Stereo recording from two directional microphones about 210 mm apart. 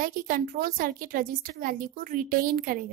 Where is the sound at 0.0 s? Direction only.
40° right (ahead or behind).